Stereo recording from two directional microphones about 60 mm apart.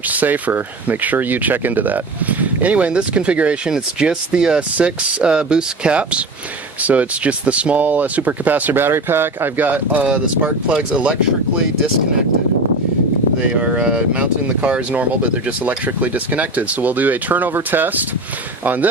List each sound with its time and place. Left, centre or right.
0.1 s speech: right
10.7 s speech: centre
13.5 s speech: centre